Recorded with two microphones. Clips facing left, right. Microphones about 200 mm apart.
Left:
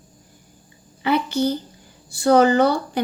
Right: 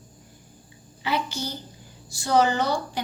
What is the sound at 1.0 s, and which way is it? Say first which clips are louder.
Speech: left 9 dB; 55° left (ahead or behind).